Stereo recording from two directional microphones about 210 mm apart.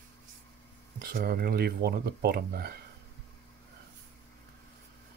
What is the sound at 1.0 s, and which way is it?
Speech, 45° right (ahead or behind).